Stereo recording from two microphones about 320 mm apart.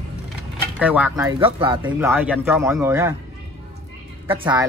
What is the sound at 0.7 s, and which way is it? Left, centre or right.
Speech, centre.